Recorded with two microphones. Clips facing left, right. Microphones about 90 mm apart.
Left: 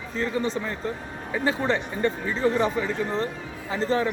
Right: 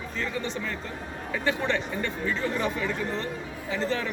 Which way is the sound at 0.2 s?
30° left (ahead or behind).